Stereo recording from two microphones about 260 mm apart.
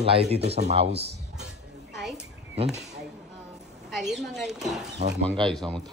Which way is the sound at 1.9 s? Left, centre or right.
Centre.